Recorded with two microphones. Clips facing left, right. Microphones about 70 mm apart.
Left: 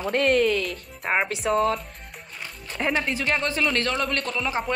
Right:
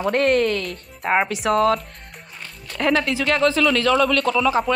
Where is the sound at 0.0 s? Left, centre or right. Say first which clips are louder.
Right 3 dB; right.